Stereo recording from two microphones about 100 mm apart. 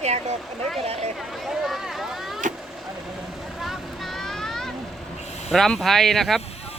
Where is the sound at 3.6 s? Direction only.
Centre (ahead or behind).